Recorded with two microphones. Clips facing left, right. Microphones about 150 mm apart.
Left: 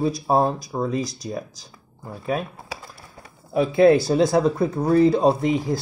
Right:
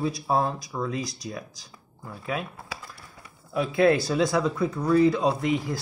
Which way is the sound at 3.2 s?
40° left (ahead or behind).